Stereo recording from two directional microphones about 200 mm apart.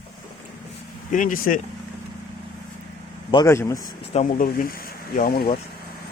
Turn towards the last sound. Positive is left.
turn(degrees=50)  # may be behind; listen again after turning